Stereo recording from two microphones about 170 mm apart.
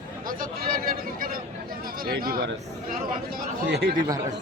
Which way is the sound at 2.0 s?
60° right (ahead or behind).